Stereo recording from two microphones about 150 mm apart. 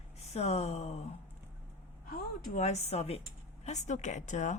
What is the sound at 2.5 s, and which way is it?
Speech, 50° left (ahead or behind).